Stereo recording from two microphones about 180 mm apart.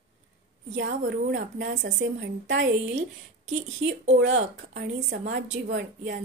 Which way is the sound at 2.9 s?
40° right (ahead or behind).